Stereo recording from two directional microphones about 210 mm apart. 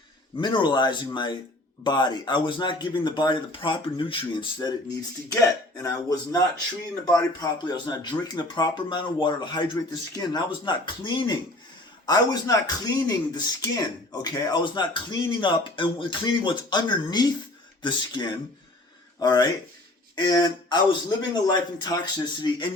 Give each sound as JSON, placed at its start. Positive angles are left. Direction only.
{"t": 0.3, "sound": "speech", "side_deg": 20}